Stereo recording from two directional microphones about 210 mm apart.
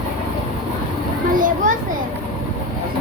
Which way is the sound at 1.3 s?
40° right (ahead or behind).